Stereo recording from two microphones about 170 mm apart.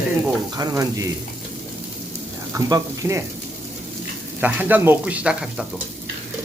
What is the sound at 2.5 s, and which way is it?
Speech, 20° right (ahead or behind).